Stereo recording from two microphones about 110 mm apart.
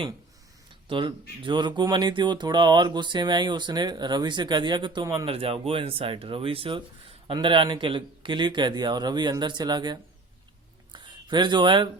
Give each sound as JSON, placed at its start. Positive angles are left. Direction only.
{"t": 0.9, "sound": "speech", "side_deg": -50}
{"t": 5.2, "sound": "speech", "side_deg": -60}
{"t": 10.9, "sound": "a sound", "side_deg": -45}